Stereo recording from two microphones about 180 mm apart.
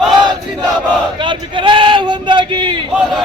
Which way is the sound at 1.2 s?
25° right (ahead or behind).